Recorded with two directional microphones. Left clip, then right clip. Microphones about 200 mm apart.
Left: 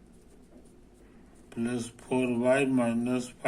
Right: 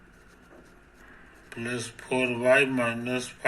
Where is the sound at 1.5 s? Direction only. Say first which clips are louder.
Right 1 dB; 30° left (ahead or behind).